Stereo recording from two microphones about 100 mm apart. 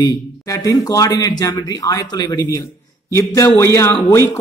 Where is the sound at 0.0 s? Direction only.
40° left (ahead or behind).